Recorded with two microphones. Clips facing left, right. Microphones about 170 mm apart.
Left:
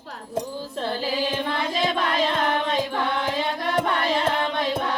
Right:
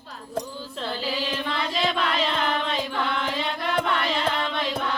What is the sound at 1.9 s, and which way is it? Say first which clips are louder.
Music: left 2 dB; 45° left (ahead or behind).